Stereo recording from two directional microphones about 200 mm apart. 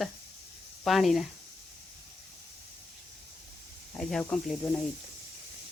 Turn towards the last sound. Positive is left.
turn(degrees=5)  # may be behind; listen again after turning